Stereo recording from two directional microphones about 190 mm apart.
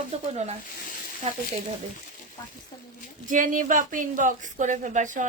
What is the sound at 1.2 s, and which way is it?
Speech, 35° right (ahead or behind).